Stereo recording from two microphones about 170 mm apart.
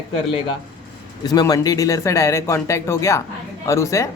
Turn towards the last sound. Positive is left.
turn(degrees=20)  # may be behind; listen again after turning